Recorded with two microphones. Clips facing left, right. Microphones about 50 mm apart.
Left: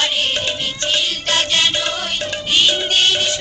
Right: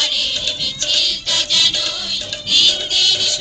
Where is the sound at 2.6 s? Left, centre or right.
Left.